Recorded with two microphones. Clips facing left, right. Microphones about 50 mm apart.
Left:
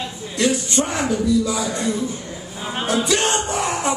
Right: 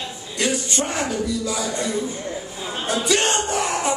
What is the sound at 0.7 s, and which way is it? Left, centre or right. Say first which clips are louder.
Speech: left 3 dB; left.